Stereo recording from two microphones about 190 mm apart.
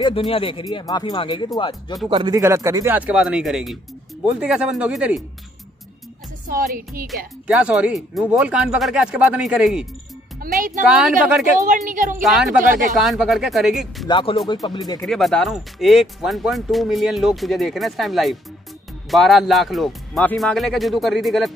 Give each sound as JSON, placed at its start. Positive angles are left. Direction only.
{"t": 0.0, "sound": "speech", "side_deg": 30}
{"t": 2.0, "sound": "speech", "side_deg": -25}
{"t": 6.4, "sound": "speech", "side_deg": -50}
{"t": 7.4, "sound": "speech", "side_deg": -5}
{"t": 10.4, "sound": "speech", "side_deg": -45}
{"t": 10.9, "sound": "speech", "side_deg": -5}
{"t": 11.6, "sound": "speech", "side_deg": -45}
{"t": 12.2, "sound": "speech", "side_deg": 0}
{"t": 14.0, "sound": "speech", "side_deg": 25}
{"t": 15.0, "sound": "speech", "side_deg": 0}